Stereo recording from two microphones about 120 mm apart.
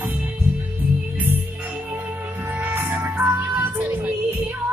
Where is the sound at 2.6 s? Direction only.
15° right (ahead or behind).